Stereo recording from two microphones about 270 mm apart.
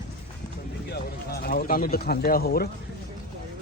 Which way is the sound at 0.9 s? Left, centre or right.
Left.